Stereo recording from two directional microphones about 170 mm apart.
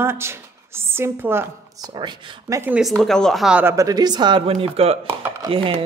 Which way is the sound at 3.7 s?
20° right (ahead or behind).